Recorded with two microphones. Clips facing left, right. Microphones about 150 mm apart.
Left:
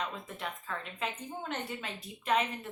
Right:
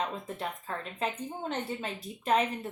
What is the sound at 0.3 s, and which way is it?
A woman's voice, 35° right (ahead or behind).